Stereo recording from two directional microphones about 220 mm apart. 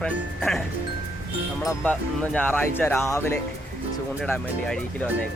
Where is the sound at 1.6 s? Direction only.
10° left (ahead or behind).